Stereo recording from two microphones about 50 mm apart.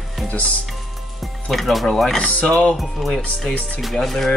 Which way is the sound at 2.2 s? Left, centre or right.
Left.